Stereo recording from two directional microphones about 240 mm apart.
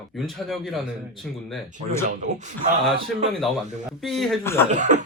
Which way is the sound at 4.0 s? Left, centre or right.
Centre.